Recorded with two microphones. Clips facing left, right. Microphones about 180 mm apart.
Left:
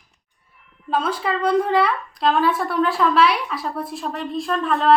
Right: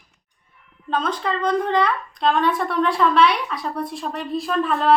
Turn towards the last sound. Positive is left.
turn(degrees=0)  # may be behind; listen again after turning